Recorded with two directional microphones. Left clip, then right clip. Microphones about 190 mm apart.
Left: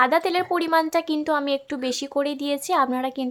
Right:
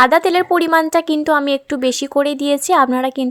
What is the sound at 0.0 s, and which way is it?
A woman's voice, 30° right (ahead or behind).